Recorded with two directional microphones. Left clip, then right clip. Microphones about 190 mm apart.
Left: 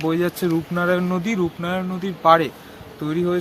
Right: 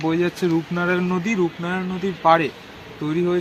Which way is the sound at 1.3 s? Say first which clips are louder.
Right 1 dB; 30° left (ahead or behind).